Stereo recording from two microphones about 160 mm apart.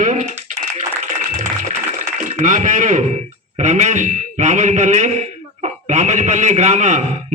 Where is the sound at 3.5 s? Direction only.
45° right (ahead or behind).